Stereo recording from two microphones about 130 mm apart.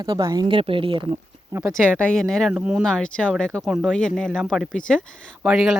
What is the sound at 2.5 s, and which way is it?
Speech, 10° right (ahead or behind).